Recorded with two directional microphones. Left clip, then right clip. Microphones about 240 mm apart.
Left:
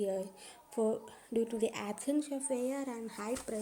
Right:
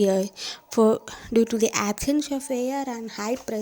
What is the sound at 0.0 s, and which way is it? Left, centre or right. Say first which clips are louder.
Speech: right 14 dB; right.